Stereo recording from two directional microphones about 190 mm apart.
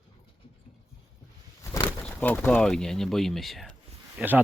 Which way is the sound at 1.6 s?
15° left (ahead or behind).